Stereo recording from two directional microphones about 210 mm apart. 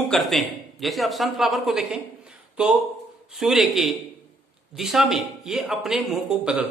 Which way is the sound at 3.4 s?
Centre (ahead or behind).